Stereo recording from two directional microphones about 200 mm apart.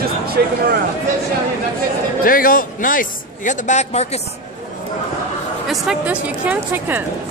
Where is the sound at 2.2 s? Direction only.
45° left (ahead or behind).